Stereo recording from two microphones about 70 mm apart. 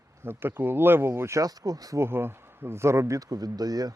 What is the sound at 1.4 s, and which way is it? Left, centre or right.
Speech, right.